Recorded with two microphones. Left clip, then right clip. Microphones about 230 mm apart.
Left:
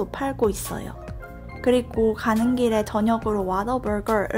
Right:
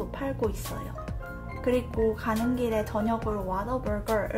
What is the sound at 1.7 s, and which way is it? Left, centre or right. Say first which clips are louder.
Speech: left 6 dB; left.